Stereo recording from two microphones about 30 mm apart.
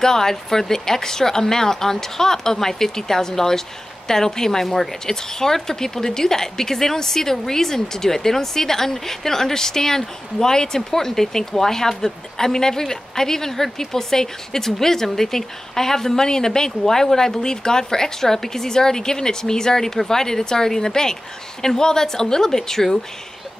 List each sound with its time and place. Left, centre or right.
0.0 s a woman's voice: centre